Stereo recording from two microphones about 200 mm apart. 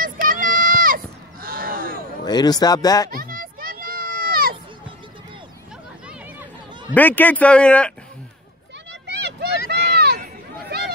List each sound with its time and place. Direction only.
0.0 s a sound: 45° right (ahead or behind)
2.2 s speech: 20° left (ahead or behind)
3.1 s children playing: 45° right (ahead or behind)
6.9 s speech: 10° left (ahead or behind)
9.0 s vehicle: 60° right (ahead or behind)
9.7 s run: 55° right (ahead or behind)